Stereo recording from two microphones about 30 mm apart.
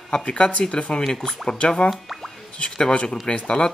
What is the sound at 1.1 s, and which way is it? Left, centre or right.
Speech, centre.